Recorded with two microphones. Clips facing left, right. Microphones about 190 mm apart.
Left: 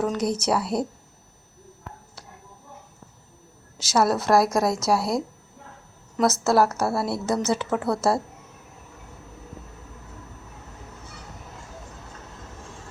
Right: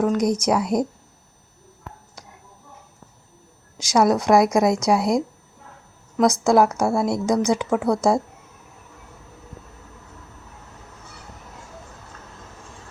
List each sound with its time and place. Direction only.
0.0 s speech: 10° right (ahead or behind)
3.9 s speech: 5° left (ahead or behind)
4.9 s speech: 15° right (ahead or behind)
6.1 s speech: 5° left (ahead or behind)
6.4 s speech: 15° right (ahead or behind)
6.7 s speech: 5° left (ahead or behind)
7.0 s speech: 15° right (ahead or behind)